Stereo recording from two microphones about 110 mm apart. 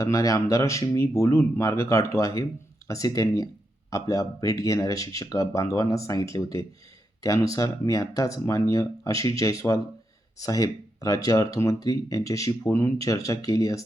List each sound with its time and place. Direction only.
0.0 s speech: 30° left (ahead or behind)